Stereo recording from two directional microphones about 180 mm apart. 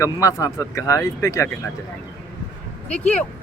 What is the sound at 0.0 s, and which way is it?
Speech, 20° left (ahead or behind).